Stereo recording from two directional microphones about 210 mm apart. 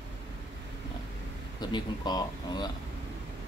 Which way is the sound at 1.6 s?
20° left (ahead or behind).